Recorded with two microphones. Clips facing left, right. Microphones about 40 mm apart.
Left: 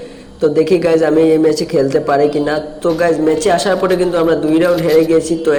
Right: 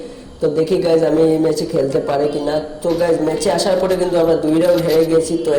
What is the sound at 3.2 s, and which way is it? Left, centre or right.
A man's voice, left.